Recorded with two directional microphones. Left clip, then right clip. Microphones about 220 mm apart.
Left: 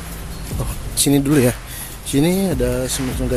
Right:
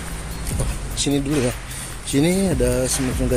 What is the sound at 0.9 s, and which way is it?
Speech, 25° left (ahead or behind).